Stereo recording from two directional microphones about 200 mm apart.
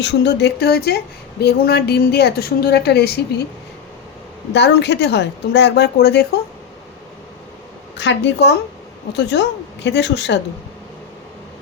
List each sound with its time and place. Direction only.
0.0 s speech: 60° left (ahead or behind)
4.5 s speech: 60° left (ahead or behind)
7.9 s speech: 60° left (ahead or behind)